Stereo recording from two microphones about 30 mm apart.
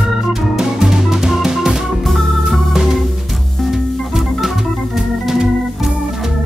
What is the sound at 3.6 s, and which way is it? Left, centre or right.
Organ, centre.